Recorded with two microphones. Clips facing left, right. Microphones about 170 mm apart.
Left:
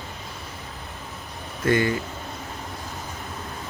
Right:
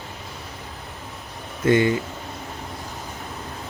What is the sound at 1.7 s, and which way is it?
Speech, 20° right (ahead or behind).